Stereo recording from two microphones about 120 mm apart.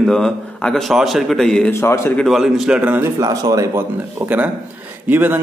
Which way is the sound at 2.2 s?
Centre (ahead or behind).